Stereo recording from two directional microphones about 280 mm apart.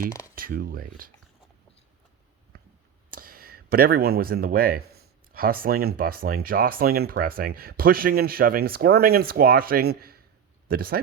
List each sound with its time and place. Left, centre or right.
0.3 s speech: right
3.1 s speech: right